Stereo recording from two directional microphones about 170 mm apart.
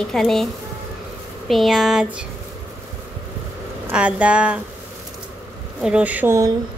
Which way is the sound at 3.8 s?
10° right (ahead or behind).